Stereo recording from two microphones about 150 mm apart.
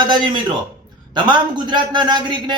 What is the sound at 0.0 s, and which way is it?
A man's voice, 30° right (ahead or behind).